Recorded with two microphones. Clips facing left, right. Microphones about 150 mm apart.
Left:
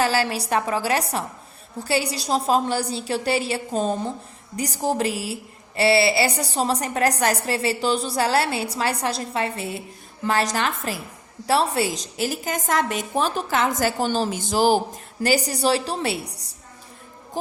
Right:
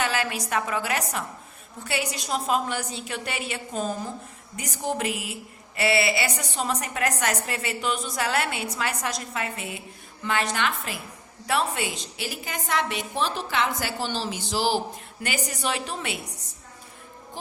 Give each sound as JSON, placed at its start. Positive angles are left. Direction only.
{"t": 0.0, "sound": "a woman's voice", "side_deg": 35}
{"t": 15.2, "sound": "speech", "side_deg": 35}